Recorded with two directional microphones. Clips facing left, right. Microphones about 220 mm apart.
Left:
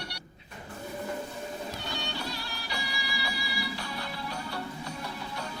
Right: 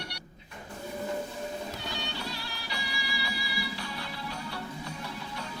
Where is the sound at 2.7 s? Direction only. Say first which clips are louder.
Left 1 dB; 45° left (ahead or behind).